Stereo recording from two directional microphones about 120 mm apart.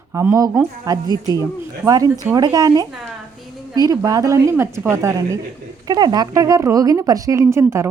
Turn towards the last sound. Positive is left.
turn(degrees=-25)  # may be behind; listen again after turning